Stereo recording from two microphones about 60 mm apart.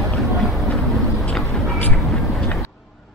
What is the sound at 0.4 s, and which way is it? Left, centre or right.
Vehicle, centre.